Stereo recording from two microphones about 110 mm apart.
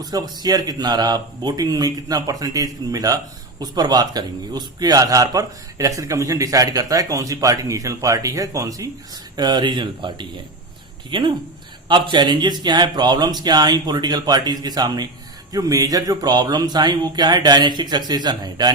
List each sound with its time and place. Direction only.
0.0 s a man's voice: 35° right (ahead or behind)